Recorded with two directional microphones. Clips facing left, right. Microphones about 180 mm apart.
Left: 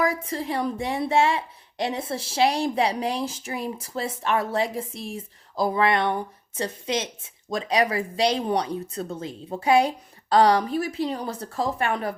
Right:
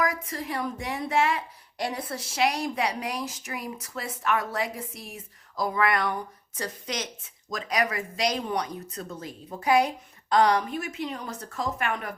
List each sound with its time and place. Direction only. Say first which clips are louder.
0.0 s a woman's voice: left 4 dB; 30° left (ahead or behind)